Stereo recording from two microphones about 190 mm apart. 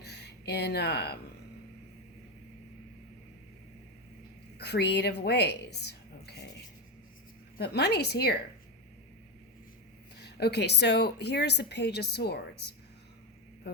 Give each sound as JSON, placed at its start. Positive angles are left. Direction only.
{"t": 0.0, "sound": "a sound", "side_deg": 60}
{"t": 4.5, "sound": "a woman's voice", "side_deg": 60}
{"t": 7.6, "sound": "speech", "side_deg": 60}
{"t": 10.2, "sound": "speech", "side_deg": 60}